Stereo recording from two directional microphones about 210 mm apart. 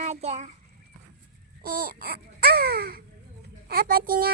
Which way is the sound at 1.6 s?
45° right (ahead or behind).